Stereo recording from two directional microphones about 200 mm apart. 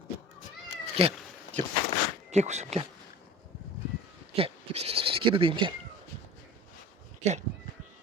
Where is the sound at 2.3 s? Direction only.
35° right (ahead or behind).